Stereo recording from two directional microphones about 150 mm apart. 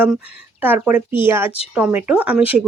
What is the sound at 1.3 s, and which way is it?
Speech, 15° right (ahead or behind).